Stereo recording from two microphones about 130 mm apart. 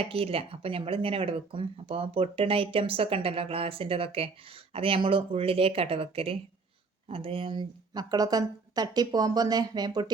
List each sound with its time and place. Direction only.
0.0 s speech: 45° right (ahead or behind)